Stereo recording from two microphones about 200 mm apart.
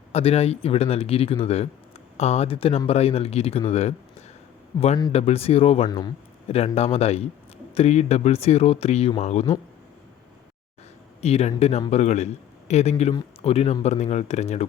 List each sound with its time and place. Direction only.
0.1 s speech: 30° left (ahead or behind)
4.7 s speech: 20° left (ahead or behind)
5.1 s speech: 30° left (ahead or behind)
11.2 s speech: 30° left (ahead or behind)